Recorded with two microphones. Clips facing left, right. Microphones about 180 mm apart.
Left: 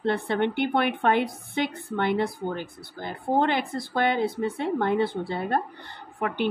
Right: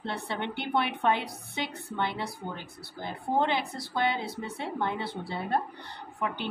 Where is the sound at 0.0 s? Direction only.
55° left (ahead or behind).